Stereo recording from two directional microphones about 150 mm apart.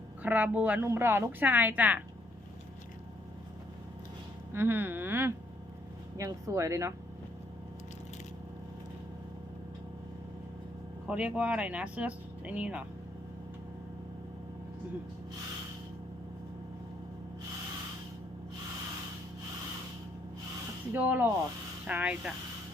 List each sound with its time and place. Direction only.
0.2 s a woman's voice: 10° right (ahead or behind)
4.5 s a woman's voice: 15° right (ahead or behind)
11.0 s a woman's voice: 10° right (ahead or behind)
20.9 s a woman's voice: 10° right (ahead or behind)